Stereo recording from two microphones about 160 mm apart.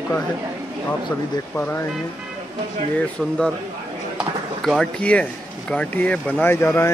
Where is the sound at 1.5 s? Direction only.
15° left (ahead or behind).